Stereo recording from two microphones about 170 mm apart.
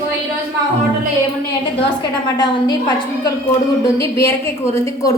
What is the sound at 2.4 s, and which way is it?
A woman's voice, 25° left (ahead or behind).